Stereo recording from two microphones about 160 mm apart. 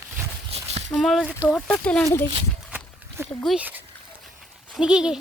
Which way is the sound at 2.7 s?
10° right (ahead or behind).